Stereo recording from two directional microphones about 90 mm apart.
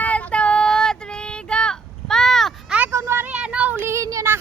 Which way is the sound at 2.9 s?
30° right (ahead or behind).